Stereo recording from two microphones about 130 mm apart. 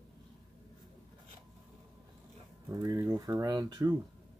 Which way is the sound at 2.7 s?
25° right (ahead or behind).